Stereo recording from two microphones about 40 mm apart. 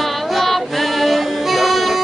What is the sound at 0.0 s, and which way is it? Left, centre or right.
Music, centre.